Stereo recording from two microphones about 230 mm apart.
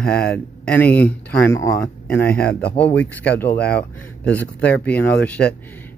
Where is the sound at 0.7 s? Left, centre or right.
Centre.